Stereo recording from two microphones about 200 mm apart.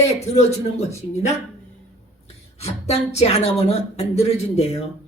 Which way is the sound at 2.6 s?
30° left (ahead or behind).